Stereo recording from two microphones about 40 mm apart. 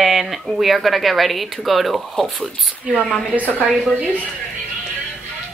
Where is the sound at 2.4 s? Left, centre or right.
Right.